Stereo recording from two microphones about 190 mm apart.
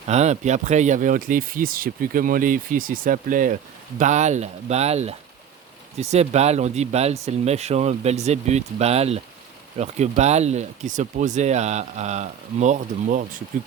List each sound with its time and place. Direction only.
0.1 s speech: 35° right (ahead or behind)